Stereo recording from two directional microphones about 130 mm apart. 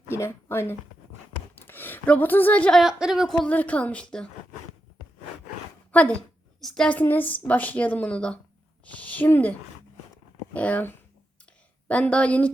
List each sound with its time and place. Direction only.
0.1 s speech: 20° left (ahead or behind)
2.8 s a woman's voice: 5° right (ahead or behind)
5.9 s a woman's voice: 10° left (ahead or behind)